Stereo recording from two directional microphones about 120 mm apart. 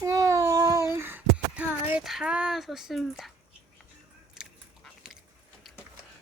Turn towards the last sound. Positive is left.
turn(degrees=-5)  # may be behind; listen again after turning